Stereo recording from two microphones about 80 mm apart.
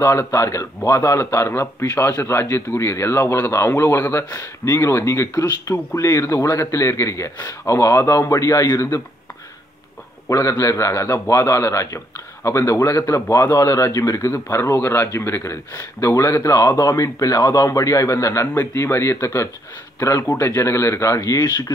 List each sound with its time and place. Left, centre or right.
0.0 s a man's voice: left
10.3 s a man's voice: left